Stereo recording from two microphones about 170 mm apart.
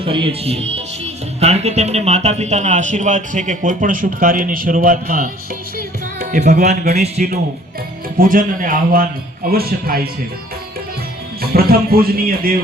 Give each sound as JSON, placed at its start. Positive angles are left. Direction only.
{"t": 0.0, "sound": "speech", "side_deg": -30}
{"t": 5.7, "sound": "music", "side_deg": -60}
{"t": 6.9, "sound": "a man's voice", "side_deg": -40}
{"t": 8.2, "sound": "a man's voice", "side_deg": -55}
{"t": 11.3, "sound": "speech", "side_deg": -60}